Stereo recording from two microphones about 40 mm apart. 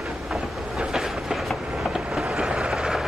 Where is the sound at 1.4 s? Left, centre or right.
Centre.